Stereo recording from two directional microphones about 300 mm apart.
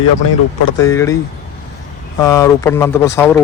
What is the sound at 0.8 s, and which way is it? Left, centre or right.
Speech, centre.